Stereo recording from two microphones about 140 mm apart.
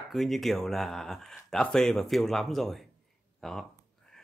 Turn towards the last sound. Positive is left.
turn(degrees=5)  # may be behind; listen again after turning